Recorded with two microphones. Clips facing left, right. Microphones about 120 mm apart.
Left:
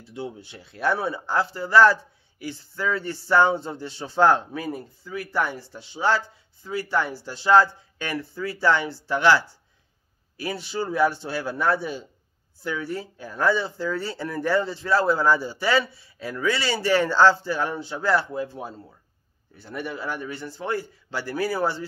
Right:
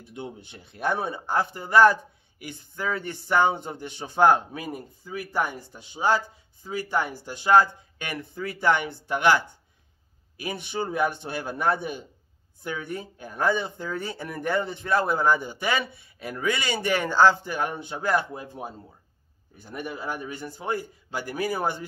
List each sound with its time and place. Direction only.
0.0 s a man's voice: 20° right (ahead or behind)